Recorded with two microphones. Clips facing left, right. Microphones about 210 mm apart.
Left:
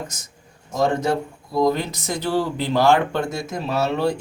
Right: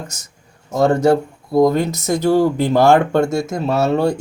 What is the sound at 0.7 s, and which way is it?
Speech, 60° right (ahead or behind).